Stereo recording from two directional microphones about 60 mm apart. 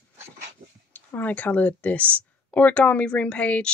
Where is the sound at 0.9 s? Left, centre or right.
Left.